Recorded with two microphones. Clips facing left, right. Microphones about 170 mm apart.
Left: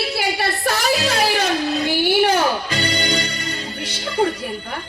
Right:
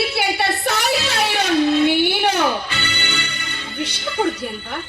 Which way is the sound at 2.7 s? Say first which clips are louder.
Left 5 dB; 35° left (ahead or behind).